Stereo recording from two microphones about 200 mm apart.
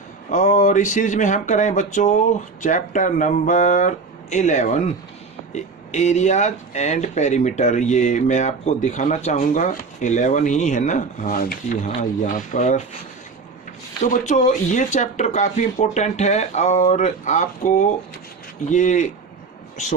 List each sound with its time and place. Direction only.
0.3 s speech: 35° left (ahead or behind)
14.0 s speech: 35° left (ahead or behind)